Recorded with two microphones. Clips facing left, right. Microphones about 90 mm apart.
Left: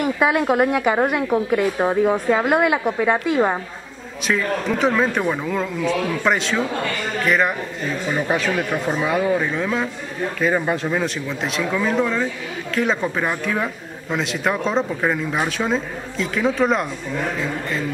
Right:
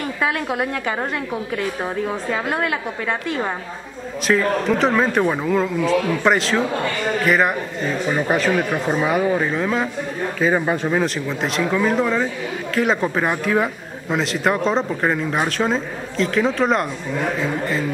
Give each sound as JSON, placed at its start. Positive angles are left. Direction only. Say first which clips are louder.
{"t": 0.0, "sound": "a woman's voice", "louder": "left 4 dB", "side_deg": 10}
{"t": 4.3, "sound": "speech", "louder": "right 3 dB", "side_deg": 0}